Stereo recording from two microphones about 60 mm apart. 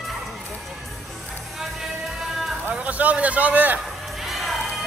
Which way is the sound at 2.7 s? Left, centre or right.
Right.